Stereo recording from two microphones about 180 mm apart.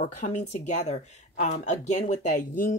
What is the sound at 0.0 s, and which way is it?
Speech, 45° left (ahead or behind).